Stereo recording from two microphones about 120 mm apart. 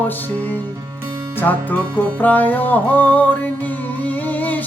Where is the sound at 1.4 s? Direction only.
15° left (ahead or behind).